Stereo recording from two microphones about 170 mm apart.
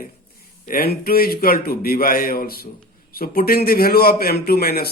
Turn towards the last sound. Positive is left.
turn(degrees=65)  # may be behind; listen again after turning